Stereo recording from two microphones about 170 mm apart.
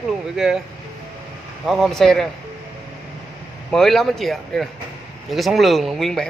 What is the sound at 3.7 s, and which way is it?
Speech, centre (ahead or behind).